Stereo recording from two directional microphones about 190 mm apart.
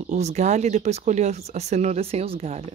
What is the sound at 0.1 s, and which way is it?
Speech, 35° right (ahead or behind).